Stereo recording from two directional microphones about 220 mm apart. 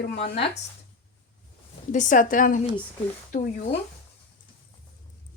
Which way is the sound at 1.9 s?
35° left (ahead or behind).